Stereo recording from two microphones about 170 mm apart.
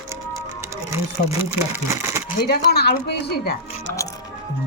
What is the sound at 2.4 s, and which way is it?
A woman's voice, 70° left (ahead or behind).